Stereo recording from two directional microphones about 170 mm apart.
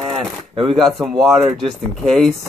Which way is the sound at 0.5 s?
30° right (ahead or behind).